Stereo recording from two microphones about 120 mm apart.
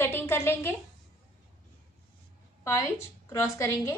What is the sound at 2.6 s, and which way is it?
A woman's voice, 25° left (ahead or behind).